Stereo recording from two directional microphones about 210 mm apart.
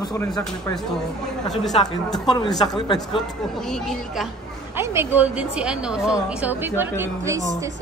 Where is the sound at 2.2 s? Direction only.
20° left (ahead or behind).